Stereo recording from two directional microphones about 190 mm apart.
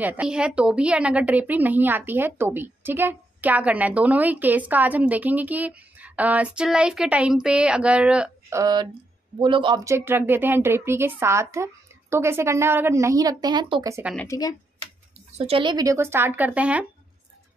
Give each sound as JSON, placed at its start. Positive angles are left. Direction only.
{"t": 0.0, "sound": "a woman's voice", "side_deg": -10}
{"t": 14.1, "sound": "a woman's voice", "side_deg": 15}
{"t": 15.3, "sound": "a woman's voice", "side_deg": -30}